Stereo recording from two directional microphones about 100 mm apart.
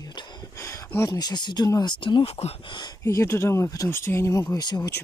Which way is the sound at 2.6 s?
50° left (ahead or behind).